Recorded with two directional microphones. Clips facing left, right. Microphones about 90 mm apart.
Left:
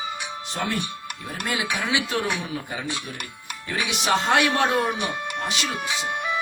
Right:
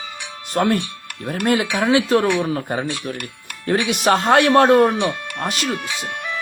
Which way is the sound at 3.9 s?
45° right (ahead or behind).